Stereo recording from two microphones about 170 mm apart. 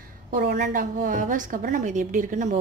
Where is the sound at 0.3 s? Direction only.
50° right (ahead or behind).